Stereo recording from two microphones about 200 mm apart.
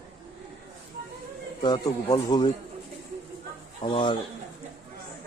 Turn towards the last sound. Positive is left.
turn(degrees=25)  # may be behind; listen again after turning